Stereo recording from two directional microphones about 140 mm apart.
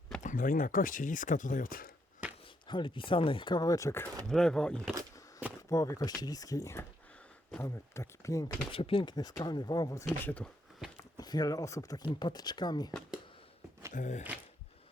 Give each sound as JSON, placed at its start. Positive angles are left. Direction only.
{"t": 0.2, "sound": "speech", "side_deg": 70}
{"t": 2.6, "sound": "speech", "side_deg": 35}
{"t": 4.3, "sound": "speech", "side_deg": 5}
{"t": 5.6, "sound": "speech", "side_deg": 20}
{"t": 8.7, "sound": "speech", "side_deg": 40}
{"t": 10.2, "sound": "speech", "side_deg": 10}
{"t": 11.2, "sound": "speech", "side_deg": 30}
{"t": 13.9, "sound": "speech", "side_deg": 60}